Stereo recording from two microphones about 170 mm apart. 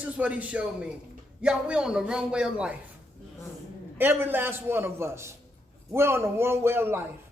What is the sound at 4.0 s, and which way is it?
A man's voice, 10° right (ahead or behind).